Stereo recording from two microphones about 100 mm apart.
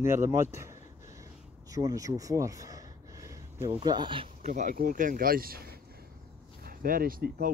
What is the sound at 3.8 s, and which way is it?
Speech, 45° right (ahead or behind).